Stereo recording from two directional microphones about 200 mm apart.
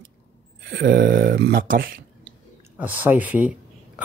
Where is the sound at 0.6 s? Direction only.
55° right (ahead or behind).